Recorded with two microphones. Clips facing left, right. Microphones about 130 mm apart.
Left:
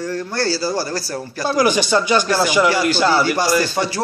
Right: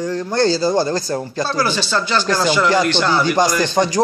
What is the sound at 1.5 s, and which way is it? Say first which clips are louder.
Speech: left 6 dB; 15° left (ahead or behind).